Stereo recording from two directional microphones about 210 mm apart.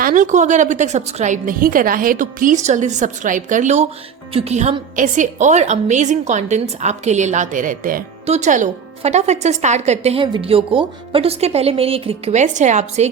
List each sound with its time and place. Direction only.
0.0 s a woman's voice: 40° right (ahead or behind)